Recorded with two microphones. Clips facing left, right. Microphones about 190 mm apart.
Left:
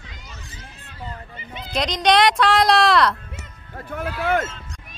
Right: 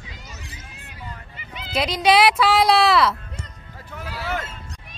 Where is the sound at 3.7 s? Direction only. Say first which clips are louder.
Left 7 dB; 55° left (ahead or behind).